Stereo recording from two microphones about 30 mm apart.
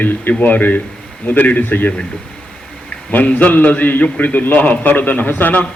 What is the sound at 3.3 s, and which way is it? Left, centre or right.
A man's voice, left.